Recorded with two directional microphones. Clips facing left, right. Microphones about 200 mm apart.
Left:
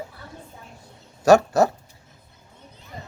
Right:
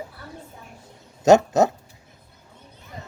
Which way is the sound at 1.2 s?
20° right (ahead or behind).